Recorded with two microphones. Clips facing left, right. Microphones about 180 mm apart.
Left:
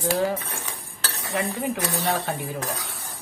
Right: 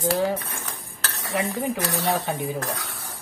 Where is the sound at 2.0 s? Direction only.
Centre (ahead or behind).